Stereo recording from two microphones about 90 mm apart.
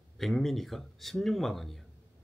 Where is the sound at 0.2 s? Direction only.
Centre (ahead or behind).